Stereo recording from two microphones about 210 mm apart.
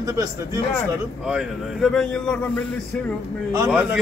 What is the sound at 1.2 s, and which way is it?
A man's voice, centre (ahead or behind).